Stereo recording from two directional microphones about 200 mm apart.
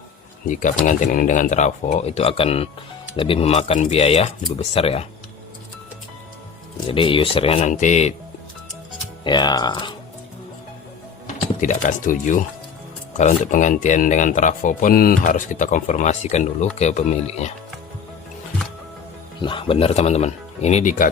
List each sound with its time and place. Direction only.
0.4 s speech: 40° left (ahead or behind)
6.8 s speech: 25° left (ahead or behind)
9.2 s speech: 20° left (ahead or behind)
11.6 s speech: 40° left (ahead or behind)
19.4 s speech: 25° left (ahead or behind)